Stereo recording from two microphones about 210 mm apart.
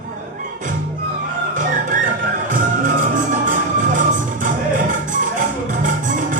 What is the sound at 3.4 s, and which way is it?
Music, 40° right (ahead or behind).